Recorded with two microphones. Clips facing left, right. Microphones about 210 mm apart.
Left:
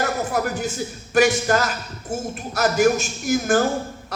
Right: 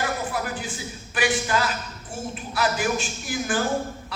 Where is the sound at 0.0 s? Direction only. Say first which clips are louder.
Left 5 dB; 45° left (ahead or behind).